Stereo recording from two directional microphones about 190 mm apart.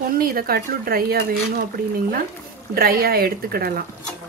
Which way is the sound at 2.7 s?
50° right (ahead or behind).